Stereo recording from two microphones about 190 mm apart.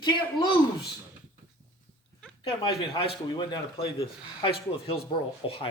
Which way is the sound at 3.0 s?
25° left (ahead or behind).